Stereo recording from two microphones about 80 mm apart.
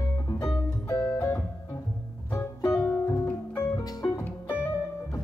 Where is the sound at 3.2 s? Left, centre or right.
Left.